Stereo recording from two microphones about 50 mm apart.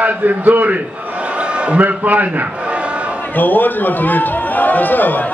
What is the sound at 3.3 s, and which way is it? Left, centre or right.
A man's voice, left.